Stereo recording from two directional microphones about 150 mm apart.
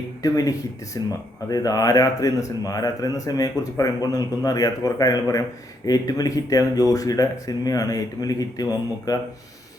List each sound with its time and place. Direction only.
0.2 s speech: 25° left (ahead or behind)